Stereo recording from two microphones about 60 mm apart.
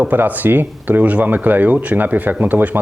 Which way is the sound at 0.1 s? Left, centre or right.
Right.